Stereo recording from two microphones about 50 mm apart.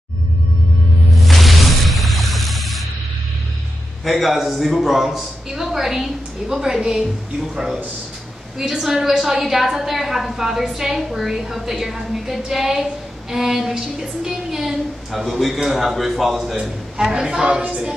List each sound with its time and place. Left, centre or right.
1.1 s snake: centre
4.0 s a woman's voice: centre; by 17.8 s right